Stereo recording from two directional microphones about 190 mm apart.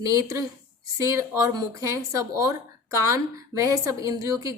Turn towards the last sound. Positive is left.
turn(degrees=-15)  # may be behind; listen again after turning